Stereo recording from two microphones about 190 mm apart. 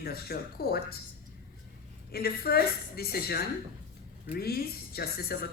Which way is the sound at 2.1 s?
55° left (ahead or behind).